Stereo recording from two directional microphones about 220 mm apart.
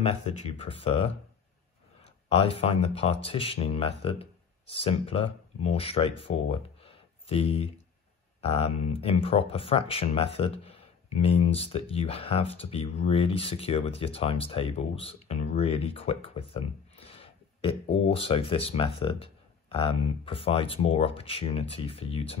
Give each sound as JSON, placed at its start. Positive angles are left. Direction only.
{"t": 0.0, "sound": "speech", "side_deg": 25}
{"t": 2.2, "sound": "speech", "side_deg": 25}